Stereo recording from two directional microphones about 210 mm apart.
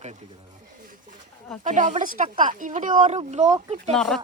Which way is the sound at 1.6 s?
35° right (ahead or behind).